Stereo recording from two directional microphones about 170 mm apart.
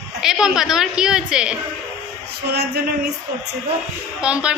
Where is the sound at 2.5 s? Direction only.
70° right (ahead or behind).